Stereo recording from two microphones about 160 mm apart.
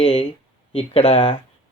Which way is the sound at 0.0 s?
35° left (ahead or behind).